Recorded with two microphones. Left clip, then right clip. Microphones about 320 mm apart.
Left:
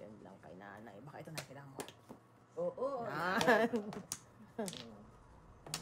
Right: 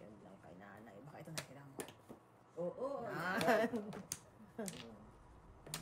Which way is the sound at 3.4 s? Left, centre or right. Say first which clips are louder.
Left 3 dB; left.